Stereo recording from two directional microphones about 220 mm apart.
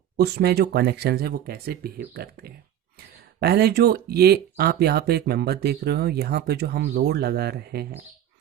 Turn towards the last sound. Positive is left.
turn(degrees=-45)  # may be behind; listen again after turning